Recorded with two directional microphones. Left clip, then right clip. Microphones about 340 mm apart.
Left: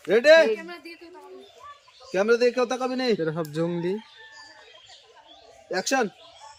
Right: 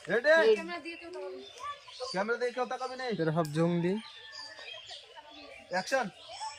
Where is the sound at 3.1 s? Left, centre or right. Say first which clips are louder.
Left 3 dB; centre.